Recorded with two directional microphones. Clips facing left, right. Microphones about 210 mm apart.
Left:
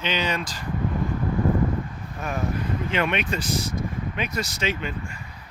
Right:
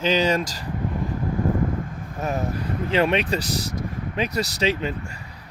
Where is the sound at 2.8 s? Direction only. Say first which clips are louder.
Right 6 dB; 35° right (ahead or behind).